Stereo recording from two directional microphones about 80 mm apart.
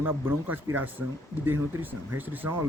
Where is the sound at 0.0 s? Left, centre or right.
Right.